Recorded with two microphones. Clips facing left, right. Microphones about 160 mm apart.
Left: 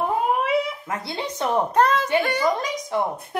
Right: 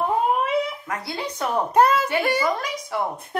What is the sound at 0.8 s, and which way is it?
Speech, 25° left (ahead or behind).